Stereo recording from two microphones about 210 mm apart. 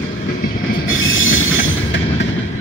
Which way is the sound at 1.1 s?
70° left (ahead or behind).